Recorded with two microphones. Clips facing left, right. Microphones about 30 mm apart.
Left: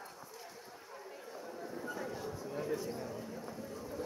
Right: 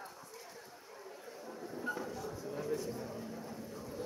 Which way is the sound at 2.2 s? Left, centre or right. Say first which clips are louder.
Even; centre.